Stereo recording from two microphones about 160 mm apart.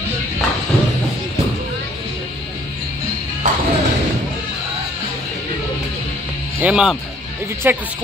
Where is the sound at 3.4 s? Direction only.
55° right (ahead or behind).